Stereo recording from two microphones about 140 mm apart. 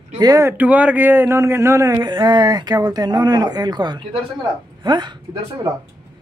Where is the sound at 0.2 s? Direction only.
20° right (ahead or behind).